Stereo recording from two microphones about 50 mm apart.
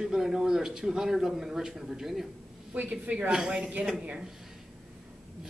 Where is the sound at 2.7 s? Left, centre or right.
Right.